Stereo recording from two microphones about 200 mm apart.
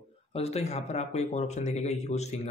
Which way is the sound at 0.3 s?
30° left (ahead or behind).